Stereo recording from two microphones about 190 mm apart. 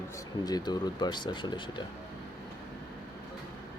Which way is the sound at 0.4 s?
20° left (ahead or behind).